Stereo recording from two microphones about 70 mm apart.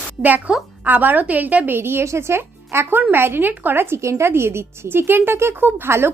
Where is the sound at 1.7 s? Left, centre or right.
Right.